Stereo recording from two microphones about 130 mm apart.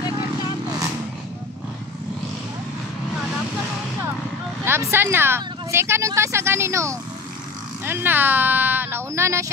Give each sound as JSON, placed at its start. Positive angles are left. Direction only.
{"t": 4.6, "sound": "speech", "side_deg": -20}